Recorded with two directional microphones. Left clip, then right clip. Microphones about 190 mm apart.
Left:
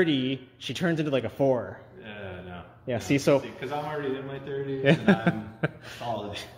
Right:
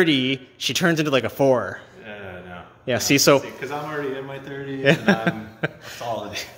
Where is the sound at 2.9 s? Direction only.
30° right (ahead or behind).